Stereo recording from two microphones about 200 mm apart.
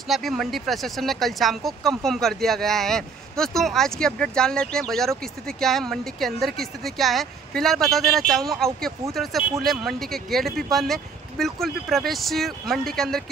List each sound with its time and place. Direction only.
0.1 s speech: centre (ahead or behind)